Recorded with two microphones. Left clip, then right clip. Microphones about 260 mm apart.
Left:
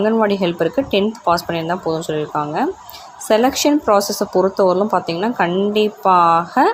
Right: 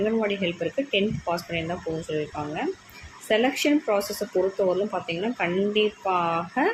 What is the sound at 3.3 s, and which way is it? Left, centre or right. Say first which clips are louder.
Speech: left 8 dB; left.